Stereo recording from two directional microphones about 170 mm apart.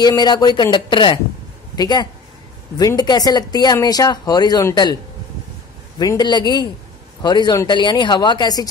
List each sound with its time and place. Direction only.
0.0 s speech: 25° left (ahead or behind)
5.9 s speech: 25° left (ahead or behind)